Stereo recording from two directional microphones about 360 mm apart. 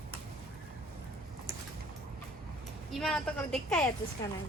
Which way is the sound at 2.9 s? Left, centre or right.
Centre.